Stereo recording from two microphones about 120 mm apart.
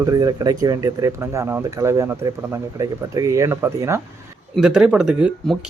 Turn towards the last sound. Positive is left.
turn(degrees=-10)  # may be behind; listen again after turning